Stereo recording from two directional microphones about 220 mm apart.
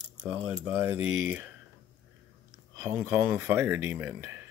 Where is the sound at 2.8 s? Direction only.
10° right (ahead or behind).